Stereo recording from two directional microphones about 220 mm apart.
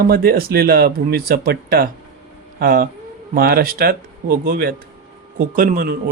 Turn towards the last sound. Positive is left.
turn(degrees=-45)  # may be behind; listen again after turning